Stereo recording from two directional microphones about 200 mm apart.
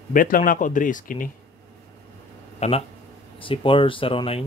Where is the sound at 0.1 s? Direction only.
45° left (ahead or behind).